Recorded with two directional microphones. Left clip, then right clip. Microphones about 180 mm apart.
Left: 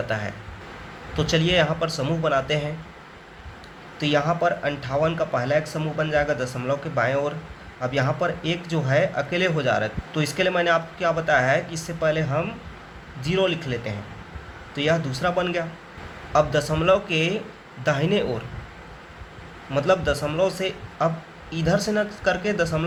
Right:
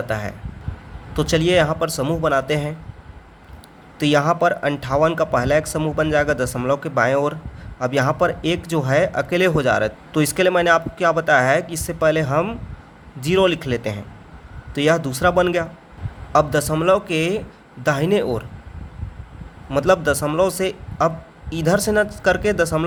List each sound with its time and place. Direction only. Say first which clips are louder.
0.1 s speech: right 2 dB; 45° right (ahead or behind)
4.0 s speech: right 5 dB; 50° right (ahead or behind)
19.7 s speech: right 4 dB; 50° right (ahead or behind)